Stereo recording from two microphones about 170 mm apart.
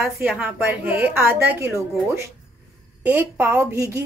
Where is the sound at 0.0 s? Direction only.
10° right (ahead or behind).